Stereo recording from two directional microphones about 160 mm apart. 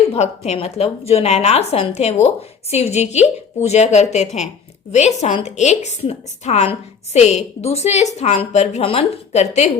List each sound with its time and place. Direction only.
0.1 s a woman's voice: 40° left (ahead or behind)